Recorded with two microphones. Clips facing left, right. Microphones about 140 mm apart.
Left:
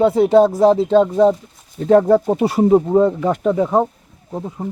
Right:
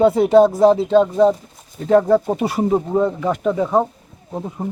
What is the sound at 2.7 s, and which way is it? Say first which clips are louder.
Speech: left 6 dB; 15° left (ahead or behind).